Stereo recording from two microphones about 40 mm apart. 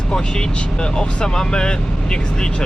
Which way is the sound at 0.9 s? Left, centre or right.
Centre.